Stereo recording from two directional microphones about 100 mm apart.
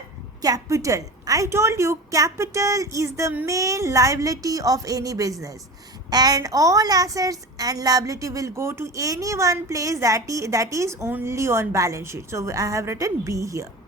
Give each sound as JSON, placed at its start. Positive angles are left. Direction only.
{"t": 0.4, "sound": "a woman's voice", "side_deg": -35}